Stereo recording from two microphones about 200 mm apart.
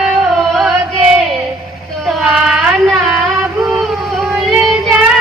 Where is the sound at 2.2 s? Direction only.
5° right (ahead or behind).